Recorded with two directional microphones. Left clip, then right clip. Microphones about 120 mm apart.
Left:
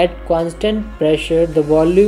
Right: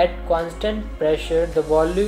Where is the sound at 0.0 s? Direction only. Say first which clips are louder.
Left 4 dB; 45° left (ahead or behind).